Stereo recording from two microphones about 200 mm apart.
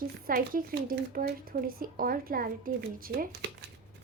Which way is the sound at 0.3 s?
45° right (ahead or behind).